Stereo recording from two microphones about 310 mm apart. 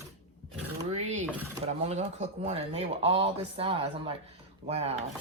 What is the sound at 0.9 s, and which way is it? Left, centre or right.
Speech, right.